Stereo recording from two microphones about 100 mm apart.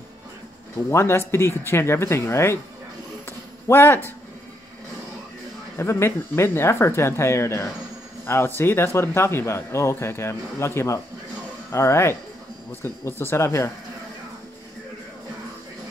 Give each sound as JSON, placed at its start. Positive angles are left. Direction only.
{"t": 0.8, "sound": "speech", "side_deg": 25}
{"t": 3.3, "sound": "a sound", "side_deg": 25}
{"t": 5.8, "sound": "speech", "side_deg": 25}